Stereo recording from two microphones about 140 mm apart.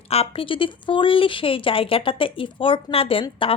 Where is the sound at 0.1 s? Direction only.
45° left (ahead or behind).